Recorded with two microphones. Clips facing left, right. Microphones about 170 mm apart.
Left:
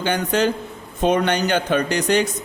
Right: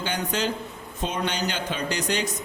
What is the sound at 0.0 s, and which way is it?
A man's voice, 60° left (ahead or behind).